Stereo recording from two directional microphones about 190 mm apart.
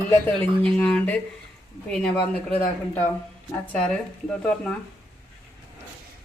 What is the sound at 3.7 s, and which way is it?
A man's voice, 5° left (ahead or behind).